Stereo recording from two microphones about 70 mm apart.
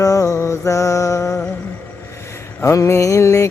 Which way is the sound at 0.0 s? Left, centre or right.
Left.